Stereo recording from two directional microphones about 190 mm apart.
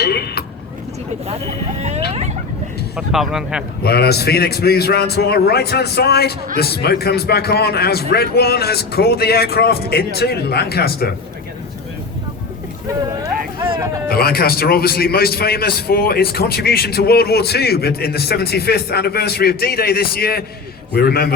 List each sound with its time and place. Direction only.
0.0 s vehicle: 55° left (ahead or behind)
1.8 s fowl: 35° right (ahead or behind)
2.9 s a man's voice: centre (ahead or behind)
3.8 s a man's voice: 55° left (ahead or behind)
13.7 s speech: 15° right (ahead or behind)
14.1 s a man's voice: 55° left (ahead or behind)